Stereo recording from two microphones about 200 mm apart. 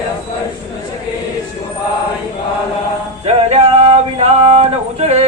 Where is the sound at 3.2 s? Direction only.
30° right (ahead or behind).